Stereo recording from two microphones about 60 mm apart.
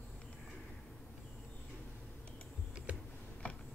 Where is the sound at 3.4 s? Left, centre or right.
Left.